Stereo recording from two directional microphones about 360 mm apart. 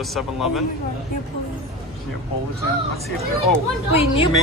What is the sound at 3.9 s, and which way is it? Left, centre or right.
Speech, centre.